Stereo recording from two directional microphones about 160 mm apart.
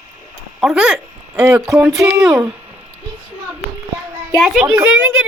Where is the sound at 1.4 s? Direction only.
20° right (ahead or behind).